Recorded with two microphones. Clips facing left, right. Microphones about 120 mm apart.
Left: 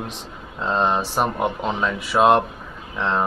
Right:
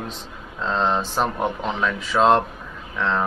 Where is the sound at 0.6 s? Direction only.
15° left (ahead or behind).